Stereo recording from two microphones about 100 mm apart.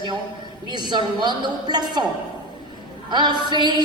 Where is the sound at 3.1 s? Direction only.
45° right (ahead or behind).